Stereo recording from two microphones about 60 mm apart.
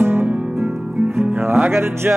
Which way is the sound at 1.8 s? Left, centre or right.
Right.